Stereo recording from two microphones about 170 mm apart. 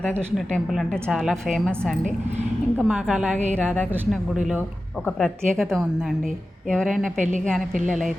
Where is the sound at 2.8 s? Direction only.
5° right (ahead or behind).